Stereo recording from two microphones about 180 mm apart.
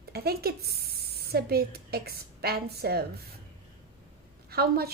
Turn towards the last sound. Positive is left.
turn(degrees=-60)  # may be behind; listen again after turning